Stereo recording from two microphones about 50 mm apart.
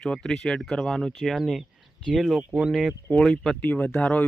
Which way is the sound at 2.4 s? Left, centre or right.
Right.